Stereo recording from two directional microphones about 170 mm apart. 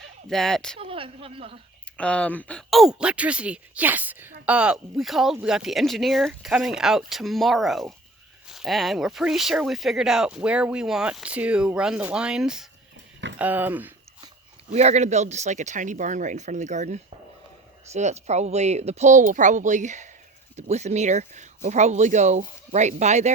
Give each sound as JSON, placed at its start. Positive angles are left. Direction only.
{"t": 0.3, "sound": "speech", "side_deg": 0}
{"t": 0.8, "sound": "speech", "side_deg": -35}
{"t": 2.0, "sound": "speech", "side_deg": 5}
{"t": 14.7, "sound": "speech", "side_deg": -40}